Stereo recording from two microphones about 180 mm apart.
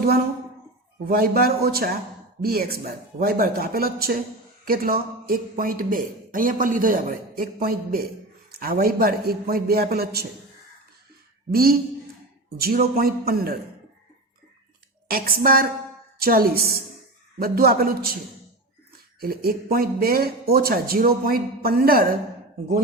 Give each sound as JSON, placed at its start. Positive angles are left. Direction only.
{"t": 1.0, "sound": "speech", "side_deg": -55}
{"t": 11.5, "sound": "speech", "side_deg": -55}
{"t": 15.0, "sound": "speech", "side_deg": -55}
{"t": 19.2, "sound": "speech", "side_deg": -55}